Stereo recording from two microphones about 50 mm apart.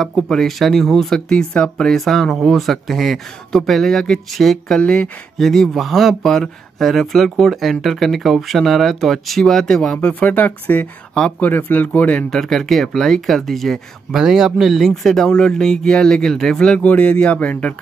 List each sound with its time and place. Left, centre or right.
0.0 s speech: centre
1.5 s speech: centre
1.9 s speech: centre
4.7 s speech: centre
5.4 s speech: centre
10.3 s speech: left
12.3 s speech: centre
14.1 s speech: centre
15.0 s speech: centre
16.7 s speech: left